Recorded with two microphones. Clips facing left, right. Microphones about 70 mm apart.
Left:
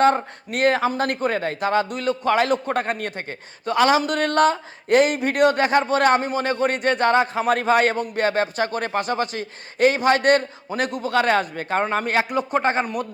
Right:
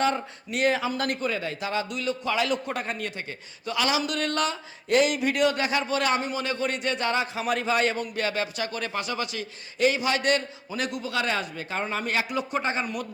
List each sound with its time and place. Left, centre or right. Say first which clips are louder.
0.0 s speech: left 8 dB; left